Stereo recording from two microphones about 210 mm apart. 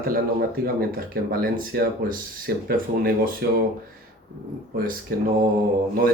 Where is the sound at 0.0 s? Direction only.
45° right (ahead or behind).